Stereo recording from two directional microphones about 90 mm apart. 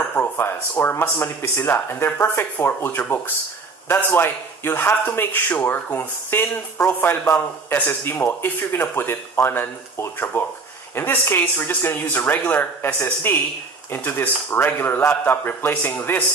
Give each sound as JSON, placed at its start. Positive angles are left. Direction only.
{"t": 0.1, "sound": "a man's voice", "side_deg": 25}